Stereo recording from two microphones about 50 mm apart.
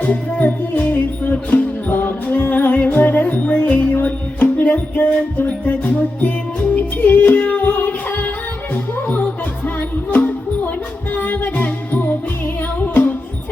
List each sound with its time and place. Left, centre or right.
0.0 s music: left